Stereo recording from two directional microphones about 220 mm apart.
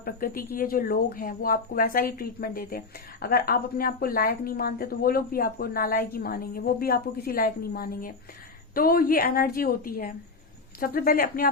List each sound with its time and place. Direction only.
0.0 s speech: 40° left (ahead or behind)